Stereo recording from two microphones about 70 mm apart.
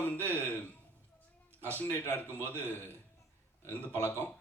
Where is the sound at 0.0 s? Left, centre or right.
Left.